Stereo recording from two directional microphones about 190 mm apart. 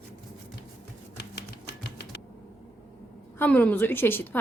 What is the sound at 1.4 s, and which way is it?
Typewriter, 60° left (ahead or behind).